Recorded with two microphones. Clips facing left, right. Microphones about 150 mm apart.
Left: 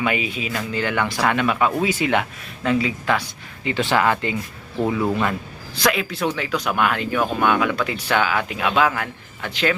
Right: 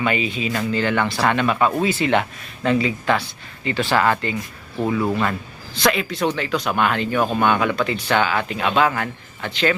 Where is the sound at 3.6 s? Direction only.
15° left (ahead or behind).